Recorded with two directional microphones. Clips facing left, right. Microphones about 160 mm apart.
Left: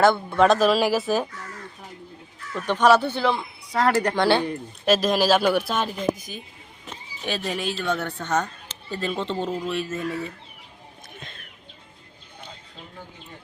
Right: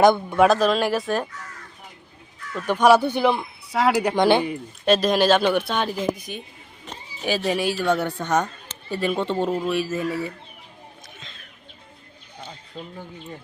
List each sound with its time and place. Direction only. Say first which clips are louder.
0.0 s speech: right 2 dB; 15° right (ahead or behind)
0.4 s speech: even; centre (ahead or behind)
2.6 s speech: right 2 dB; 10° right (ahead or behind)
4.9 s speech: right 2 dB; centre (ahead or behind)
7.3 s speech: right 5 dB; 5° right (ahead or behind)